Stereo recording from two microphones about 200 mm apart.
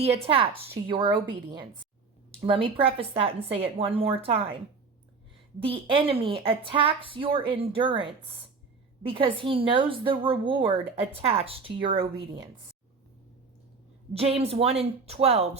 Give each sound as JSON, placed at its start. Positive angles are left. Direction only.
{"t": 0.0, "sound": "a woman's voice", "side_deg": -30}
{"t": 5.5, "sound": "a woman's voice", "side_deg": -25}
{"t": 14.1, "sound": "a woman's voice", "side_deg": -30}